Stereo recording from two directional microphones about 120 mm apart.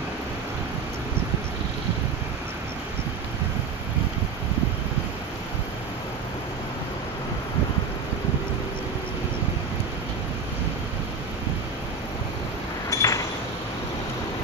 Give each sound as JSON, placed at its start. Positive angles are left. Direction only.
{"t": 12.9, "sound": "chink", "side_deg": 25}